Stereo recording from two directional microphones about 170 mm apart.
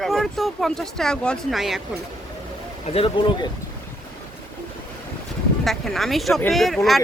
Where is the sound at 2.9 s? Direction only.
35° left (ahead or behind).